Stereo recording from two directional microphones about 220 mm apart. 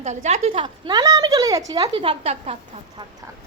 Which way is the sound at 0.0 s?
30° right (ahead or behind).